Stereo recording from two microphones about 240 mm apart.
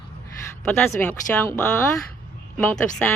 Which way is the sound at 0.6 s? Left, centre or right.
Centre.